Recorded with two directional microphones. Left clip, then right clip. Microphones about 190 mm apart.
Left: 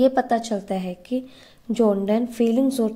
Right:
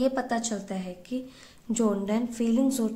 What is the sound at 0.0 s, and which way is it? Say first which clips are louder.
A woman's voice: left 8 dB; 30° left (ahead or behind).